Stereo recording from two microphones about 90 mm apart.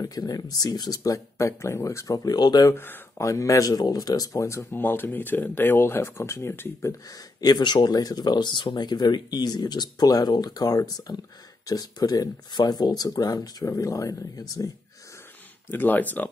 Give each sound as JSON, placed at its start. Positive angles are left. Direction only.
{"t": 0.0, "sound": "speech", "side_deg": 45}
{"t": 2.1, "sound": "speech", "side_deg": 50}
{"t": 2.7, "sound": "speech", "side_deg": 25}
{"t": 3.3, "sound": "speech", "side_deg": 40}
{"t": 4.8, "sound": "speech", "side_deg": 25}
{"t": 7.1, "sound": "speech", "side_deg": 50}
{"t": 15.7, "sound": "speech", "side_deg": 20}